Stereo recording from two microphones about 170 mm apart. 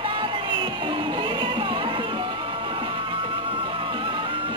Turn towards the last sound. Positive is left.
turn(degrees=-30)  # may be behind; listen again after turning